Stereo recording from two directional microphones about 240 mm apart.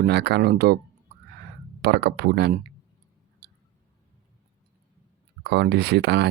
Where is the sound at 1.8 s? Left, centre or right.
Right.